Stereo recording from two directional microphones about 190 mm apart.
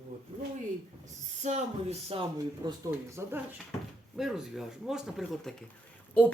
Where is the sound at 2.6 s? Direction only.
15° right (ahead or behind).